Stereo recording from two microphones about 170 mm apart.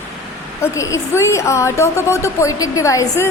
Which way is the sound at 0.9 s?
15° left (ahead or behind).